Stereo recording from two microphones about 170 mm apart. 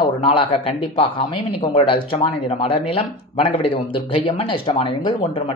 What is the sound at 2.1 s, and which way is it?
Speech, 35° left (ahead or behind).